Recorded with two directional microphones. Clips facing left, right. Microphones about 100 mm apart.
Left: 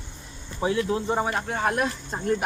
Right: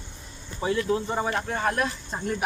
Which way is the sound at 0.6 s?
20° left (ahead or behind).